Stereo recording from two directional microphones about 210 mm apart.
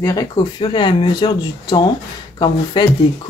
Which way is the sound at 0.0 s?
15° left (ahead or behind).